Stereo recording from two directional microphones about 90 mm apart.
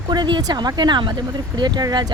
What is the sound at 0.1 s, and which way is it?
Speech, 55° right (ahead or behind).